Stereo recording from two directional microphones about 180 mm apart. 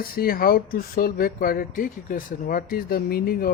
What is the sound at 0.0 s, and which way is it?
Speech, 55° left (ahead or behind).